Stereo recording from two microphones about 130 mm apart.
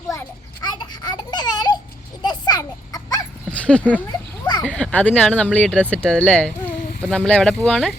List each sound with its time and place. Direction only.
0.6 s a sound: 35° left (ahead or behind)
2.2 s children playing: 35° left (ahead or behind)
3.5 s speech: 10° left (ahead or behind)